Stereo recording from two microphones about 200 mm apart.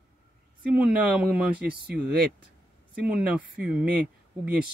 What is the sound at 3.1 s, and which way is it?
Speech, 5° right (ahead or behind).